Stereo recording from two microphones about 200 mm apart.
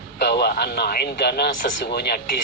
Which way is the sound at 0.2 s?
55° left (ahead or behind).